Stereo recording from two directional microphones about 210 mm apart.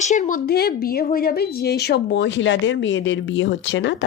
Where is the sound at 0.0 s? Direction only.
35° left (ahead or behind).